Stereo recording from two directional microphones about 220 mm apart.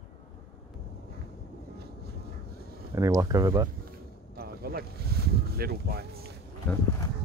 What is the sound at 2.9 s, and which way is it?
Speech, 15° right (ahead or behind).